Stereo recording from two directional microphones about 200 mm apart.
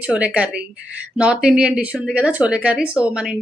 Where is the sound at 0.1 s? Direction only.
5° right (ahead or behind).